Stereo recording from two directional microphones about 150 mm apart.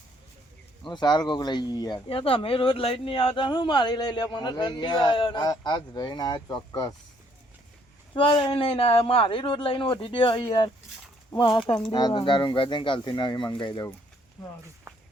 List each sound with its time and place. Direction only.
0.9 s speech: 30° left (ahead or behind)
2.0 s speech: 40° left (ahead or behind)
8.1 s speech: 35° left (ahead or behind)